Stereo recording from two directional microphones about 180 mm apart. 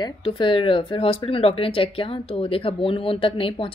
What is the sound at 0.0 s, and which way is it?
A woman's voice, 30° left (ahead or behind).